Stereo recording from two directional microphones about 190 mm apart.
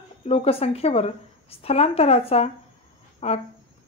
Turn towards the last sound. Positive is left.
turn(degrees=35)  # may be behind; listen again after turning